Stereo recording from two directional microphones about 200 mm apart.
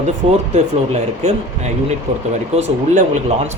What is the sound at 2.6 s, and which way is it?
Speech, 35° right (ahead or behind).